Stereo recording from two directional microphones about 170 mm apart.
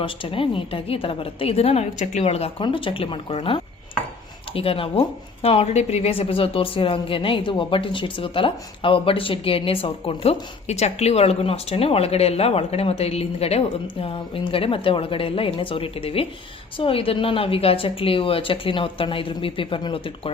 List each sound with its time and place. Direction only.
0.0 s speech: 30° left (ahead or behind)